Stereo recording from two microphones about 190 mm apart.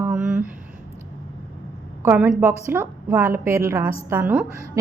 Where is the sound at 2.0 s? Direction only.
10° right (ahead or behind).